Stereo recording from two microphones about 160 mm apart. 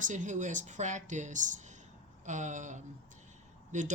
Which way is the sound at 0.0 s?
50° right (ahead or behind).